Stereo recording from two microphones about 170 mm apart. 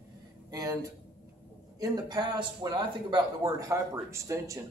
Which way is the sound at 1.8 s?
25° right (ahead or behind).